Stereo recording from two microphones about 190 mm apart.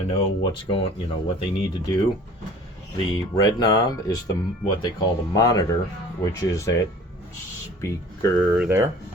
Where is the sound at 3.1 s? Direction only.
20° left (ahead or behind).